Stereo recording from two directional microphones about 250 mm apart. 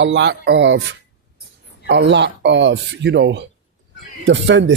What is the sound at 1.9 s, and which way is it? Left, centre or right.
Speech, right.